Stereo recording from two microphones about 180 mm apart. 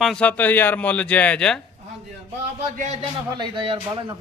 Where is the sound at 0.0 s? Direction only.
5° left (ahead or behind).